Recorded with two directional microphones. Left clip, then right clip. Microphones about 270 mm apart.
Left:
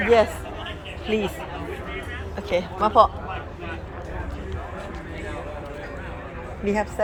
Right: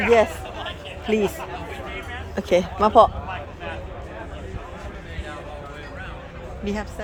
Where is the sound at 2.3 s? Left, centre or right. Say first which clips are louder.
Right 5 dB; right.